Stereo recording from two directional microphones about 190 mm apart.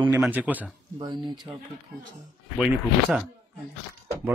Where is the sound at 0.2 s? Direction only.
10° right (ahead or behind).